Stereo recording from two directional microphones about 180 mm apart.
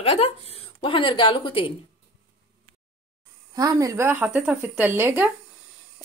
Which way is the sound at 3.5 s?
20° right (ahead or behind).